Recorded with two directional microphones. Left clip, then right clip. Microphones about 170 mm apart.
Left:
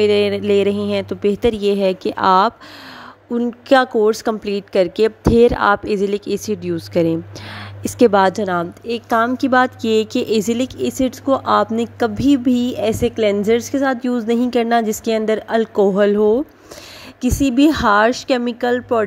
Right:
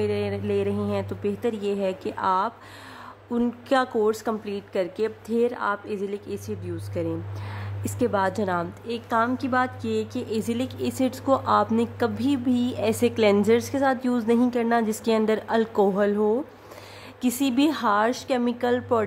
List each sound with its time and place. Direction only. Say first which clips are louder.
0.0 s a woman's voice: left 12 dB; 40° left (ahead or behind)
3.3 s a woman's voice: left 9 dB; 30° left (ahead or behind)
8.3 s a woman's voice: left 7 dB; 30° left (ahead or behind)
13.0 s a woman's voice: left 2 dB; 15° left (ahead or behind)